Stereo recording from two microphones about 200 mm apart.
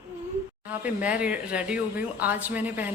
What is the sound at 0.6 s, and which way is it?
Speech, 5° right (ahead or behind).